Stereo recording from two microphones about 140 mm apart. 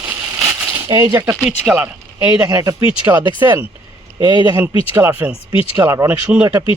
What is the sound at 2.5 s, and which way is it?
Speech, 25° right (ahead or behind).